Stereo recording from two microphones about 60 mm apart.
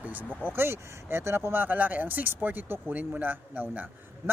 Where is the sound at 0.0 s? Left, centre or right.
Right.